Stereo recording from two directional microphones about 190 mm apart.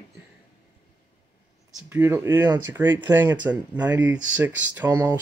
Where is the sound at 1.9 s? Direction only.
10° right (ahead or behind).